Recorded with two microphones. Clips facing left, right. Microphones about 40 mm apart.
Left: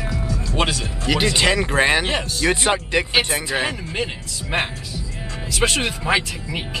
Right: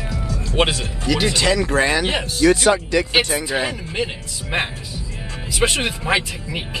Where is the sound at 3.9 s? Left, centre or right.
Centre.